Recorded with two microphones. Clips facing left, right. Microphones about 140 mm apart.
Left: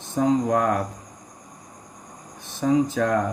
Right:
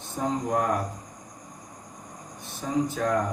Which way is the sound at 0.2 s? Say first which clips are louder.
Left 6 dB; 90° left.